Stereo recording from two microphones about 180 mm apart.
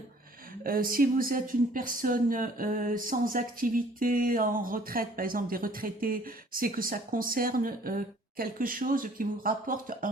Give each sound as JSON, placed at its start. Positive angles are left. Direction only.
{"t": 0.6, "sound": "speech", "side_deg": -50}